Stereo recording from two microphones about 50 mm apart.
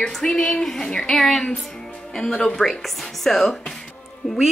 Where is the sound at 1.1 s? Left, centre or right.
Centre.